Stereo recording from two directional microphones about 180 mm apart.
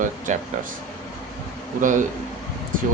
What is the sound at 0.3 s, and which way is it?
Speech, 45° right (ahead or behind).